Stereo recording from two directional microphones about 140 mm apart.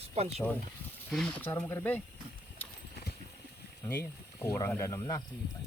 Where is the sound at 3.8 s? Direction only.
15° left (ahead or behind).